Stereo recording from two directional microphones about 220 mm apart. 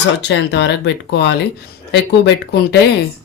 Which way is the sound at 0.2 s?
50° left (ahead or behind).